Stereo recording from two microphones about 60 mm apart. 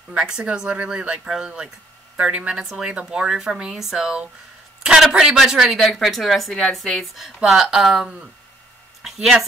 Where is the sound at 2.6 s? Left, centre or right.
Centre.